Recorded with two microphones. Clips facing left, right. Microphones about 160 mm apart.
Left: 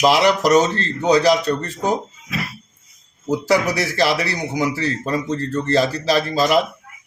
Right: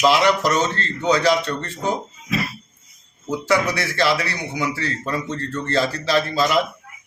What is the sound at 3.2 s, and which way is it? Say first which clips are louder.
A man's voice: left 2 dB; 40° left (ahead or behind).